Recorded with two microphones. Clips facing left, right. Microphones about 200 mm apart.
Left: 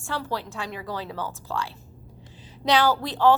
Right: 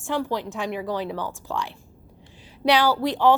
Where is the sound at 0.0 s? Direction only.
15° right (ahead or behind).